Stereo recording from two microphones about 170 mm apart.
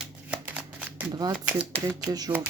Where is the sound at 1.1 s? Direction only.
25° right (ahead or behind).